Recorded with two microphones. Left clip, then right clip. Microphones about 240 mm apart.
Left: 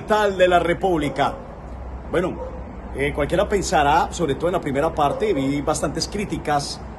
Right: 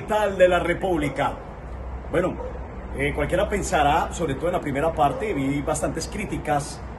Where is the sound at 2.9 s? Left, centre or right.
Centre.